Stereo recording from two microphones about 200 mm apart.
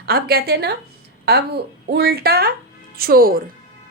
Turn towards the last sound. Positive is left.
turn(degrees=-45)  # may be behind; listen again after turning